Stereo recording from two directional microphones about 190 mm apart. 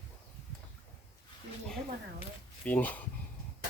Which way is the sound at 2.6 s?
10° left (ahead or behind).